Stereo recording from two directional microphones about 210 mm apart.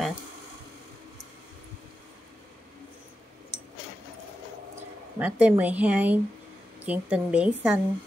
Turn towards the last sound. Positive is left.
turn(degrees=-5)  # may be behind; listen again after turning